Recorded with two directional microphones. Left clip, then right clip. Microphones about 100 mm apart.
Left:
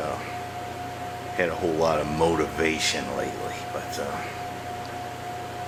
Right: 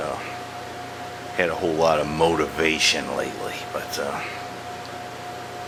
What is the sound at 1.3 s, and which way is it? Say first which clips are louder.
Speech: right 3 dB; 20° right (ahead or behind).